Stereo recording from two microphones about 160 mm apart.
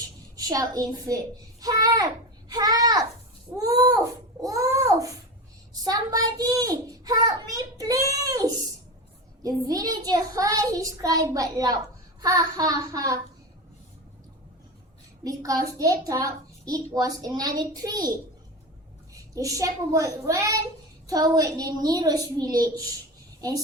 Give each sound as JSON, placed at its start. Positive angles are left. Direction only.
{"t": 0.3, "sound": "a child's voice", "side_deg": -25}
{"t": 2.5, "sound": "a sound", "side_deg": -25}
{"t": 3.5, "sound": "a child's voice", "side_deg": -25}
{"t": 15.2, "sound": "a child's voice", "side_deg": -20}
{"t": 19.1, "sound": "a child's voice", "side_deg": -20}